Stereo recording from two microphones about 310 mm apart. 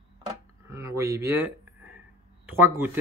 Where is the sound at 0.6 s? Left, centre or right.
Centre.